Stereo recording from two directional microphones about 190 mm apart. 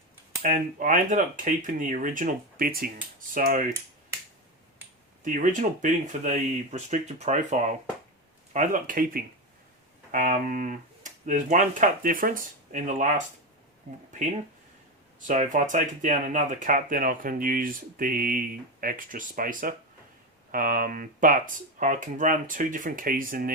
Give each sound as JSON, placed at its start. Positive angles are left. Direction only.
{"t": 0.4, "sound": "speech", "side_deg": -45}
{"t": 5.2, "sound": "speech", "side_deg": -40}
{"t": 15.3, "sound": "speech", "side_deg": -40}